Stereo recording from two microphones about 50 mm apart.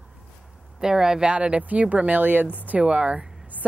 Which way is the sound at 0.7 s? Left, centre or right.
Centre.